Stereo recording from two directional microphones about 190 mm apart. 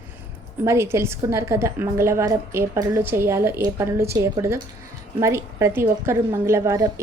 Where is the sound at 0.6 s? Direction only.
15° right (ahead or behind).